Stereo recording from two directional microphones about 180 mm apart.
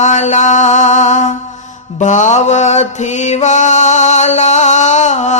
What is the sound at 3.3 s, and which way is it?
Music, 40° left (ahead or behind).